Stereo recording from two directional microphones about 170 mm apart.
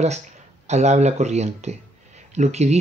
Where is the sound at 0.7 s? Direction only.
40° right (ahead or behind).